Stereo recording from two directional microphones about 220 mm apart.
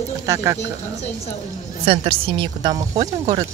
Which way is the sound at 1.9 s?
25° right (ahead or behind).